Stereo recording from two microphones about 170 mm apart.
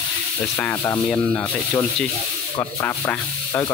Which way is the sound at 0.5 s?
15° left (ahead or behind).